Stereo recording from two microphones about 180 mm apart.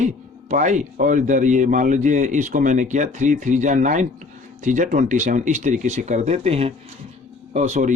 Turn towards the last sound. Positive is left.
turn(degrees=-45)  # may be behind; listen again after turning